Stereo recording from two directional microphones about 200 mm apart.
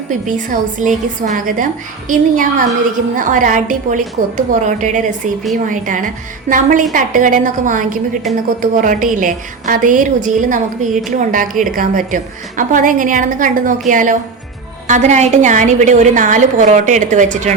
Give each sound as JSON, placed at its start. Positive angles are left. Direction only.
{"t": 0.1, "sound": "a woman's voice", "side_deg": -40}